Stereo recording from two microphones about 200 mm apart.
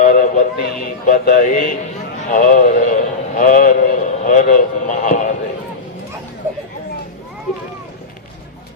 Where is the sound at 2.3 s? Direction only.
40° left (ahead or behind).